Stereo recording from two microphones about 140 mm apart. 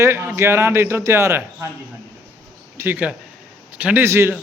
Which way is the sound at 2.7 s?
15° right (ahead or behind).